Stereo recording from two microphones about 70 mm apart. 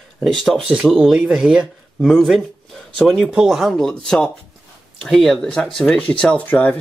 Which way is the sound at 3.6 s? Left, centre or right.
Centre.